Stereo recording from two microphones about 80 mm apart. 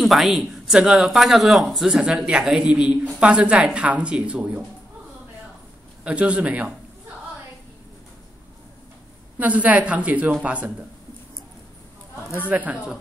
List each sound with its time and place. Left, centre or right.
0.0 s a woman's voice: centre
6.0 s a woman's voice: centre
9.4 s a woman's voice: centre
12.4 s speech: centre